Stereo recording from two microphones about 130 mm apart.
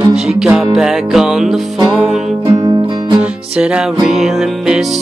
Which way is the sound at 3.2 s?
10° right (ahead or behind).